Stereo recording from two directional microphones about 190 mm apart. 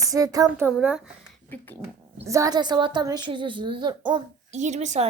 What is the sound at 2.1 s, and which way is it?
A woman's voice, 15° right (ahead or behind).